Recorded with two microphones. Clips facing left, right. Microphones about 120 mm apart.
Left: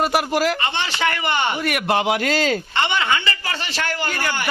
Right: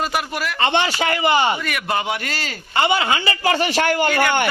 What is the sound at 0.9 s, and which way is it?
Speech, 35° right (ahead or behind).